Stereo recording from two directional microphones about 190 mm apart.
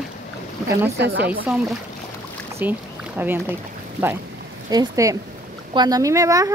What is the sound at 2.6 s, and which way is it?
Speech, 10° right (ahead or behind).